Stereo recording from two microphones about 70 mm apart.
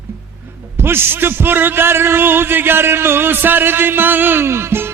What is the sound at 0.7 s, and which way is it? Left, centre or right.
A man's voice, right.